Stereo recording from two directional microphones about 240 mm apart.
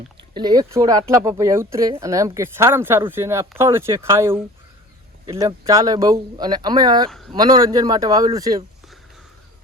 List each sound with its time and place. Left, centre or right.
0.3 s speech: centre